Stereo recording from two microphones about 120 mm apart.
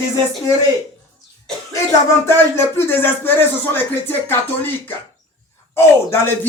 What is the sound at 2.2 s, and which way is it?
Speech, 20° left (ahead or behind).